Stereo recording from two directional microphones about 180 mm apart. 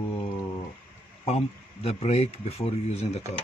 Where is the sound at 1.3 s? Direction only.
35° left (ahead or behind).